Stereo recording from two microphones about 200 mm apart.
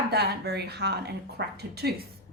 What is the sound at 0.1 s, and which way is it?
A woman's voice, 55° right (ahead or behind).